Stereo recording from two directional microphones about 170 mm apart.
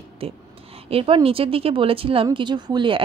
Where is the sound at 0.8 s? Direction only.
35° right (ahead or behind).